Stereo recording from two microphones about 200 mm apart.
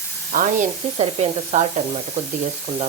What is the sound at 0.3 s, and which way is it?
Speech, 35° right (ahead or behind).